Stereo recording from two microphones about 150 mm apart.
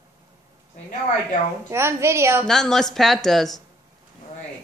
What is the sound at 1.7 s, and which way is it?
Speech, 15° right (ahead or behind).